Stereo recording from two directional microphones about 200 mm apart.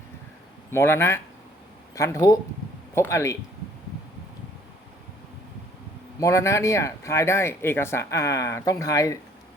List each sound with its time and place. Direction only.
0.7 s speech: 10° left (ahead or behind)
6.1 s speech: 15° left (ahead or behind)